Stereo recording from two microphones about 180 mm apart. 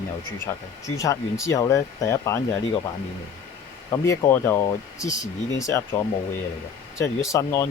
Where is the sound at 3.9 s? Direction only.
15° left (ahead or behind).